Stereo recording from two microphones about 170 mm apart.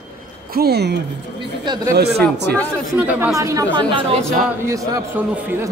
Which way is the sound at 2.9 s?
10° right (ahead or behind).